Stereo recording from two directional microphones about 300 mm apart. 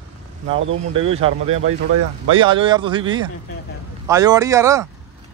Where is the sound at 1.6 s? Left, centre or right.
Right.